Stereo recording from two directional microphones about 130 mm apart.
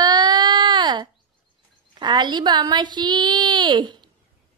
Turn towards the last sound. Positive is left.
turn(degrees=-35)  # may be behind; listen again after turning